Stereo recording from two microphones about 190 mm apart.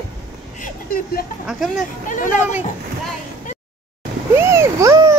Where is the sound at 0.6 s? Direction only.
50° left (ahead or behind).